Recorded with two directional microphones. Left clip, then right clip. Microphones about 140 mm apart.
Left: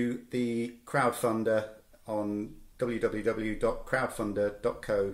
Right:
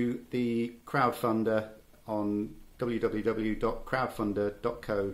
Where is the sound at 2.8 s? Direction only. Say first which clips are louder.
Left 1 dB; 15° right (ahead or behind).